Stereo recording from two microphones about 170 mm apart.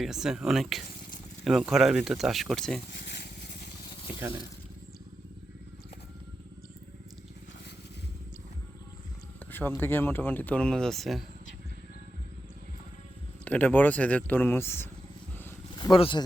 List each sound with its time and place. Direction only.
0.0 s speech: 5° right (ahead or behind)
2.9 s a sound: 80° left
9.5 s a sound: 10° left (ahead or behind)
9.8 s speech: 15° left (ahead or behind)
13.4 s speech: 10° left (ahead or behind)
15.8 s speech: 30° left (ahead or behind)